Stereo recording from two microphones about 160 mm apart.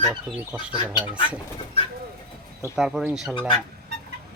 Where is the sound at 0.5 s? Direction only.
10° right (ahead or behind).